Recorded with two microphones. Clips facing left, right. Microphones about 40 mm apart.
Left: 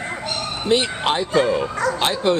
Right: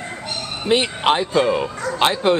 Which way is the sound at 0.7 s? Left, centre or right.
Right.